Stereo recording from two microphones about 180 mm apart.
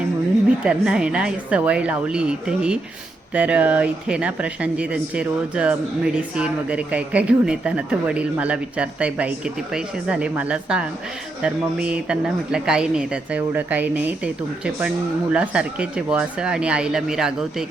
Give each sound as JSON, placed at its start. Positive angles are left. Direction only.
{"t": 0.6, "sound": "speech", "side_deg": -5}